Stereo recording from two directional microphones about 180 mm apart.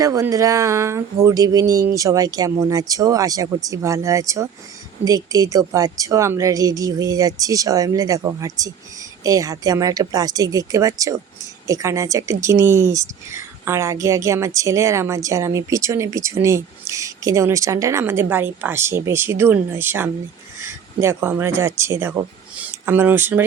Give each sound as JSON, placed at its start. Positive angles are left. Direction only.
{"t": 0.0, "sound": "speech", "side_deg": -20}